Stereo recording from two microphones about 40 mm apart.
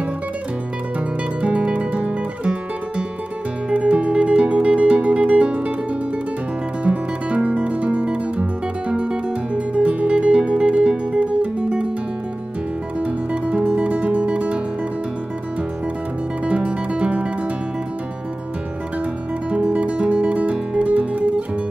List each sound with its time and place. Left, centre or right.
1.4 s guitar: right
3.7 s music: right
6.8 s music: right
13.0 s music: right
16.4 s music: right
19.5 s music: right